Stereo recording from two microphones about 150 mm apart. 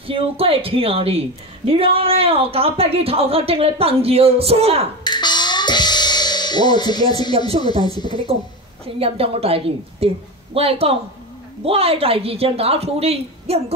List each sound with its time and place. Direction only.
0.0 s a woman's voice: 40° right (ahead or behind)
5.0 s music: 30° left (ahead or behind)
8.0 s speech: 30° left (ahead or behind)
8.8 s a woman's voice: 40° right (ahead or behind)